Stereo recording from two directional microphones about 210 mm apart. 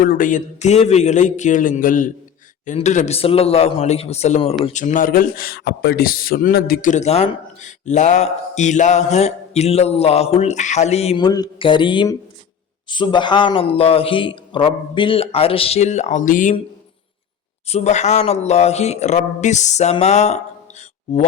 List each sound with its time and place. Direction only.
0.0 s speech: 40° left (ahead or behind)
17.7 s speech: 30° left (ahead or behind)